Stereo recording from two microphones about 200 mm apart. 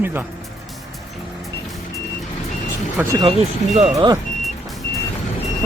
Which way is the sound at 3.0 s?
10° right (ahead or behind).